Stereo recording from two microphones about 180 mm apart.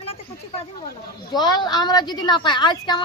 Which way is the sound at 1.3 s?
25° left (ahead or behind).